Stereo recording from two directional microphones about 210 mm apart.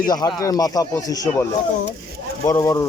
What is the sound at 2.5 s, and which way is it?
Speech, 15° left (ahead or behind).